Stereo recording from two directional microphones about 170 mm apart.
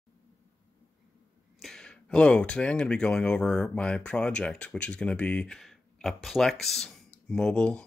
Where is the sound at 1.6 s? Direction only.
5° left (ahead or behind).